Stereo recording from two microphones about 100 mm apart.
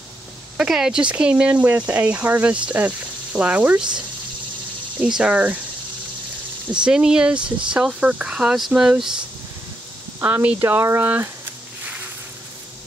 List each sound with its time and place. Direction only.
0.6 s speech: 5° right (ahead or behind)
5.0 s speech: 10° right (ahead or behind)
6.7 s speech: 10° right (ahead or behind)
10.2 s speech: 20° right (ahead or behind)